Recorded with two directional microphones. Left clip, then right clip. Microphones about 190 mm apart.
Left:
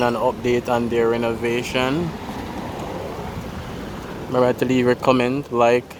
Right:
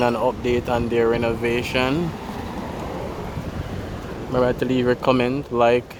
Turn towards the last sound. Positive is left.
turn(degrees=0)  # may be behind; listen again after turning